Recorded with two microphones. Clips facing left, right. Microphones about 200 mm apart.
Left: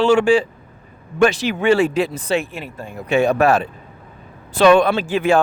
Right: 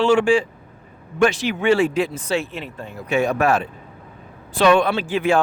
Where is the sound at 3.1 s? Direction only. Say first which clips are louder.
Left 3 dB; 30° left (ahead or behind).